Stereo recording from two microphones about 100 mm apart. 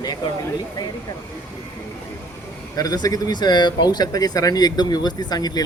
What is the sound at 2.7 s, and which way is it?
A man's voice, 40° left (ahead or behind).